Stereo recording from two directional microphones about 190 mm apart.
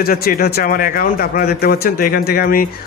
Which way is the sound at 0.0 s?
50° left (ahead or behind).